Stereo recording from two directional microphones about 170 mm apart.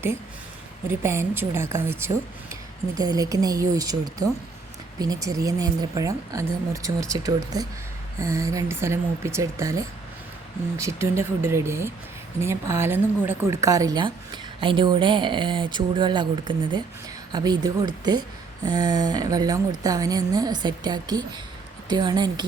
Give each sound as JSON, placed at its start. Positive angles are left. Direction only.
{"t": 0.9, "sound": "speech", "side_deg": -15}